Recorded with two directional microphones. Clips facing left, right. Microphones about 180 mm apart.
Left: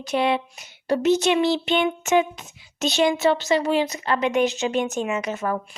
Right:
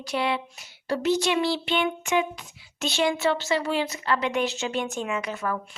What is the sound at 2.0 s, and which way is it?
Speech, 45° left (ahead or behind).